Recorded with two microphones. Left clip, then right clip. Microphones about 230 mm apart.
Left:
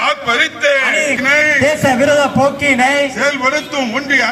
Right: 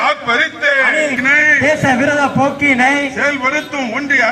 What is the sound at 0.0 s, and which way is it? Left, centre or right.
A man's voice, left.